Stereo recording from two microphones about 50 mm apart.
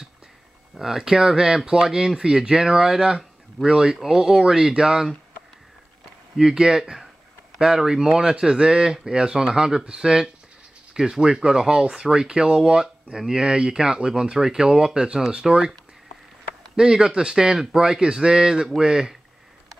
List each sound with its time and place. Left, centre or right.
0.7 s speech: centre
6.3 s speech: centre
16.7 s speech: centre